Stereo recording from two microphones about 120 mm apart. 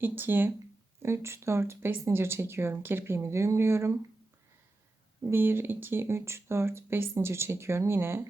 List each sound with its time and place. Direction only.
0.0 s speech: 15° right (ahead or behind)
5.3 s speech: 20° right (ahead or behind)